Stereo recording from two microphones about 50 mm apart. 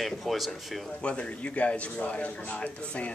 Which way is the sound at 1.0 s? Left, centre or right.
Left.